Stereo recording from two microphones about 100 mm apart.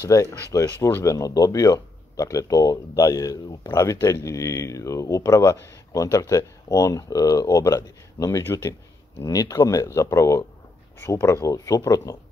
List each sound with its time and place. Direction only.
0.0 s speech: 35° left (ahead or behind)